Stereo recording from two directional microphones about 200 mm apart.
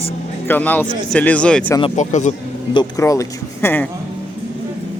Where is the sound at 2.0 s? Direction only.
35° left (ahead or behind).